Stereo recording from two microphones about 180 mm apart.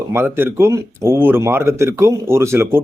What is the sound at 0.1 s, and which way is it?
Speech, 10° right (ahead or behind).